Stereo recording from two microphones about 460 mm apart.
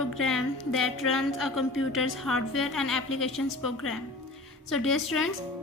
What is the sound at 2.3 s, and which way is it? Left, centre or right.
A woman's voice, left.